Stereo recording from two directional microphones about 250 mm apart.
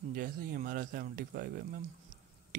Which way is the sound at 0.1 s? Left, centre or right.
Right.